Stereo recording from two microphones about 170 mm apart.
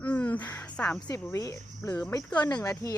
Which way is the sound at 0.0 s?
10° left (ahead or behind).